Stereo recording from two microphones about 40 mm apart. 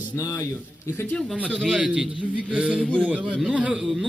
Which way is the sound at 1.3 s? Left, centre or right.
Right.